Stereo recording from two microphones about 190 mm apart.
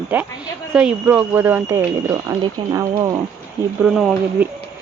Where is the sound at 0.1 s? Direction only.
10° right (ahead or behind).